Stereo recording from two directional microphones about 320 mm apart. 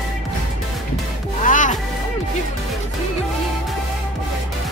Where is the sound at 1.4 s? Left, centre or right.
Left.